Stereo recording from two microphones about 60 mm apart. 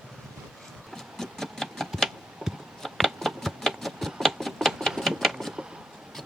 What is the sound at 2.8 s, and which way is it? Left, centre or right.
Shuffling cards, centre.